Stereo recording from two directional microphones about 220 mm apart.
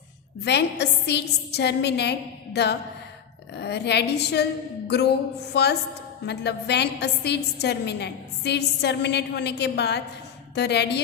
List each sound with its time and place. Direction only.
0.4 s a woman's voice: 50° left (ahead or behind)
5.5 s a woman's voice: 50° left (ahead or behind)